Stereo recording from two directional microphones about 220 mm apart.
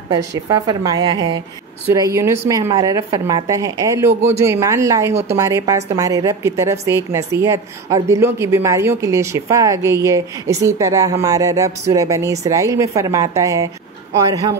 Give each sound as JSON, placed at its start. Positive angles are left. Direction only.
{"t": 0.1, "sound": "a woman's voice", "side_deg": -15}